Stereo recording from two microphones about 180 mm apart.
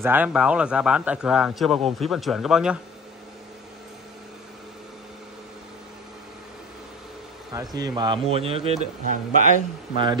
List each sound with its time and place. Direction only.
0.0 s a man's voice: 10° right (ahead or behind)
7.7 s a man's voice: 20° right (ahead or behind); by 9.5 s 45° right (ahead or behind)